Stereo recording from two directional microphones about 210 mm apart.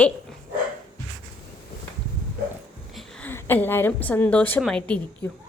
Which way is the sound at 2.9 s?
Centre (ahead or behind).